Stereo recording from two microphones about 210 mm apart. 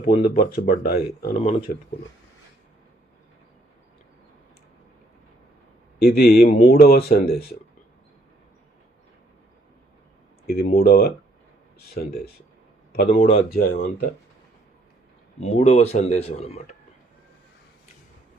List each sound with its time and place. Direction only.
0.0 s speech: 45° left (ahead or behind)
6.0 s speech: 45° left (ahead or behind)
10.4 s speech: 45° left (ahead or behind)
13.1 s speech: 25° left (ahead or behind)
13.5 s speech: 45° left (ahead or behind)
15.4 s speech: 30° left (ahead or behind)